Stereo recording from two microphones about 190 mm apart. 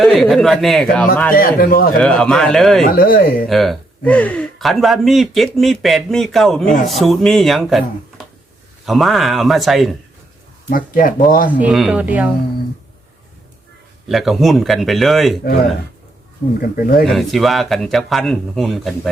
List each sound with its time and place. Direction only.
0.0 s speech: centre (ahead or behind)
1.3 s speech: 50° left (ahead or behind)
2.0 s speech: 5° left (ahead or behind)
2.9 s speech: 50° left (ahead or behind)
3.5 s speech: centre (ahead or behind)
10.7 s speech: 45° left (ahead or behind)
11.4 s speech: 5° right (ahead or behind)
14.1 s speech: centre (ahead or behind)
16.6 s speech: 50° left (ahead or behind)
17.1 s speech: centre (ahead or behind)